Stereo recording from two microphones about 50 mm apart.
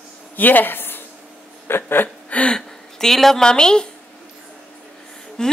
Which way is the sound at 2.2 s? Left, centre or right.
Left.